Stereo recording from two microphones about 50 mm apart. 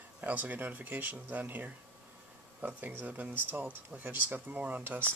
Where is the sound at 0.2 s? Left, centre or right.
Right.